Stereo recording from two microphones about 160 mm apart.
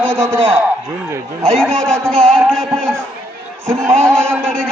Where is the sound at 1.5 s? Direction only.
5° left (ahead or behind).